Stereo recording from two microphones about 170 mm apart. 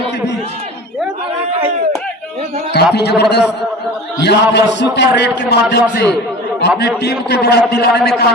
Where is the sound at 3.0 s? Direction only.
80° left.